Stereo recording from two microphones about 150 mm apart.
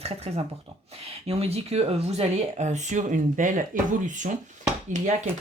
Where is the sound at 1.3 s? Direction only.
45° right (ahead or behind); by 3.6 s 60° right (ahead or behind).